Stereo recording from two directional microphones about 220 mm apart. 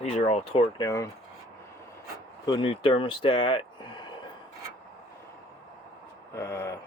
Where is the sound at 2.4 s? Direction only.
20° left (ahead or behind).